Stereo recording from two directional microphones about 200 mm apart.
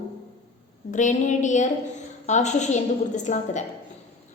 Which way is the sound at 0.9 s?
40° left (ahead or behind).